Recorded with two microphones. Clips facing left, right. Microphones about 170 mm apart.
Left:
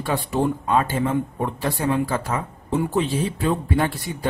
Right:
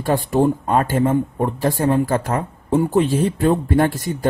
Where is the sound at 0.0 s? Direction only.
45° right (ahead or behind).